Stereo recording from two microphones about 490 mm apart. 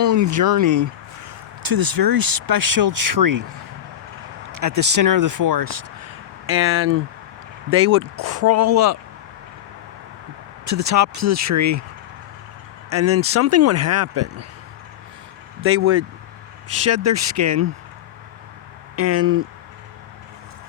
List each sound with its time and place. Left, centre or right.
0.0 s speech: right
4.5 s speech: right
6.5 s speech: right
10.7 s speech: right
12.9 s speech: right
15.6 s speech: right
18.9 s speech: right